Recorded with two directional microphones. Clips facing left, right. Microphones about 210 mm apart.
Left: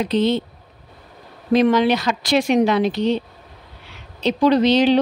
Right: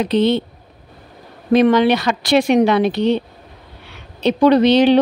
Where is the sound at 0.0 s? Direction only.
65° right (ahead or behind).